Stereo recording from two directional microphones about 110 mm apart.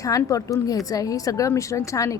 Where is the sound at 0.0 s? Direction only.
30° left (ahead or behind).